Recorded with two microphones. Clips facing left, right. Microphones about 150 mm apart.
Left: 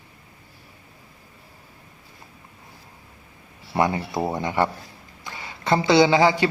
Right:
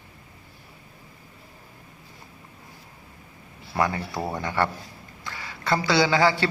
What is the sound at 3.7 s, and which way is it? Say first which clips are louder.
A man's voice: left 3 dB; 20° left (ahead or behind).